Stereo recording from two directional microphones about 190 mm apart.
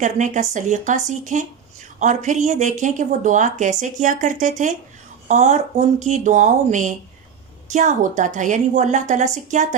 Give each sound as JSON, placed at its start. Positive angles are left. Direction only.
{"t": 0.0, "sound": "speech", "side_deg": -40}